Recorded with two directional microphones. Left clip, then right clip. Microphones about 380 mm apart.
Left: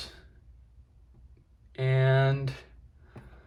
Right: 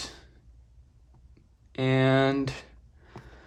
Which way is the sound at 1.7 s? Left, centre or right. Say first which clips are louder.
Right 4 dB; centre.